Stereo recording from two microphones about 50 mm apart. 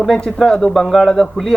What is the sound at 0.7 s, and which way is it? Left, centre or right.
Speech, centre.